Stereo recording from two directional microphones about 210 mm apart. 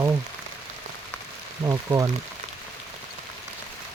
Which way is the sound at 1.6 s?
15° right (ahead or behind).